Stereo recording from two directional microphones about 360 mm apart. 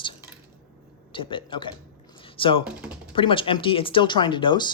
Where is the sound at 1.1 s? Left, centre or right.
Centre.